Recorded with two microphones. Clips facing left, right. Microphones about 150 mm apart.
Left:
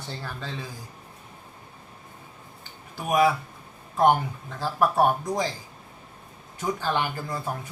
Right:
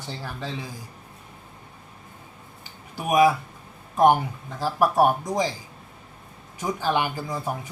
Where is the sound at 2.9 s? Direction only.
15° right (ahead or behind).